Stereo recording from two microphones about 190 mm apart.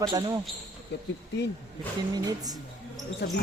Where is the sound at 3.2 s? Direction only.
65° left (ahead or behind).